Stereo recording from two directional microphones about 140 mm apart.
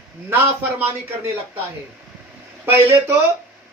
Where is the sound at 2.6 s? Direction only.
15° right (ahead or behind).